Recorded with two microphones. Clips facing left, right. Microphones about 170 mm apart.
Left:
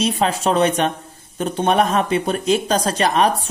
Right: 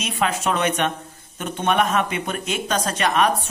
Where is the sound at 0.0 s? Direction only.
35° left (ahead or behind).